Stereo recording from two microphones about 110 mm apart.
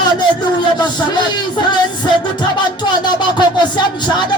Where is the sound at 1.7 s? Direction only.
45° left (ahead or behind).